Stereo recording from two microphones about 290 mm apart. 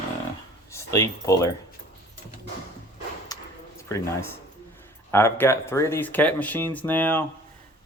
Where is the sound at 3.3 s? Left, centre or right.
Centre.